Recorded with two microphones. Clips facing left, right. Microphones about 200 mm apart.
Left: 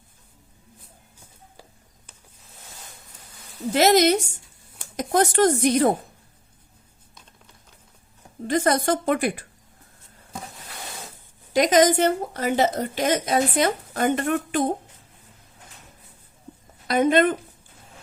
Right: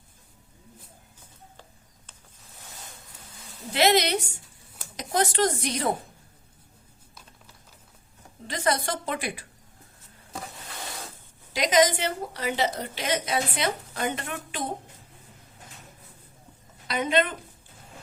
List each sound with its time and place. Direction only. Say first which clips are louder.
3.7 s a woman's voice: left 5 dB; 45° left (ahead or behind)
8.4 s a woman's voice: left 7 dB; 50° left (ahead or behind)
11.5 s a woman's voice: left 5 dB; 50° left (ahead or behind)
16.9 s a woman's voice: left 7 dB; 45° left (ahead or behind)